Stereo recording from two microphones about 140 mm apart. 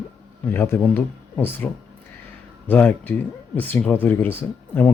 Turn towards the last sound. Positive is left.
turn(degrees=15)  # may be behind; listen again after turning